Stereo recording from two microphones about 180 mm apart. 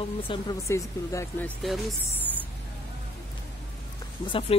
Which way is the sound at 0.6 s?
15° left (ahead or behind).